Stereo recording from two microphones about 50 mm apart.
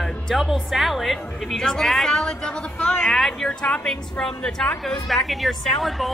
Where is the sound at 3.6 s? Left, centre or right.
Left.